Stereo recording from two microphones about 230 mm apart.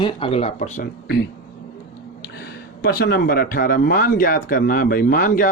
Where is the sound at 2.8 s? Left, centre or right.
Left.